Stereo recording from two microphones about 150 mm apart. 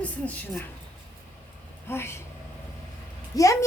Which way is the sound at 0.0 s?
10° left (ahead or behind).